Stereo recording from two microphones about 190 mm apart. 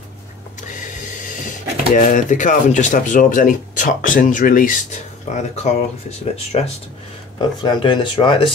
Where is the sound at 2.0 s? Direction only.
40° left (ahead or behind).